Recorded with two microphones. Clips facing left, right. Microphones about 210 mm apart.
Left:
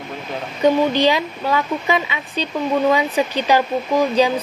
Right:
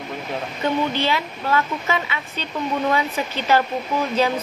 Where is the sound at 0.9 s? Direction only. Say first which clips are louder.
Left 6 dB; 15° left (ahead or behind).